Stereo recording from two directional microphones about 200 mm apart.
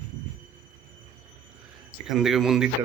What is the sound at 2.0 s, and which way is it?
Speech, centre (ahead or behind).